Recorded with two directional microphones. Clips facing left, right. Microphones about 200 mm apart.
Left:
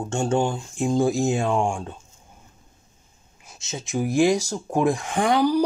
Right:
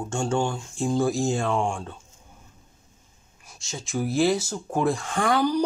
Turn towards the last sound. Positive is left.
turn(degrees=15)  # may be behind; listen again after turning